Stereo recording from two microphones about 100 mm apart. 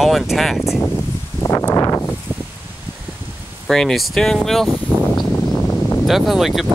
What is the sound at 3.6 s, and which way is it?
Speech, 5° left (ahead or behind).